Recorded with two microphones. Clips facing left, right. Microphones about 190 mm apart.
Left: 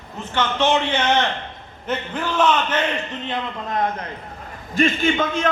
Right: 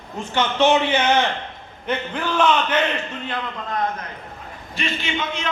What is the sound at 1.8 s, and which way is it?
Speech, 5° left (ahead or behind).